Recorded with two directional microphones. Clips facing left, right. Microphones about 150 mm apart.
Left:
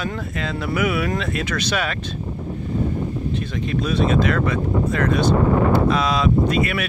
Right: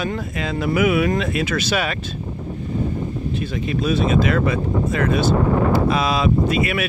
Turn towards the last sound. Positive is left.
turn(degrees=-10)  # may be behind; listen again after turning